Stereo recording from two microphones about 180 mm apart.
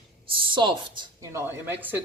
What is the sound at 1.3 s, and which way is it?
Speech, 10° right (ahead or behind).